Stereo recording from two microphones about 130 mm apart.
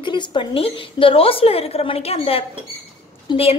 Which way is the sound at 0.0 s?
35° left (ahead or behind).